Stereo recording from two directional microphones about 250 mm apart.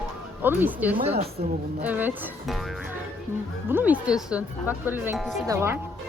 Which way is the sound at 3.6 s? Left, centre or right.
Centre.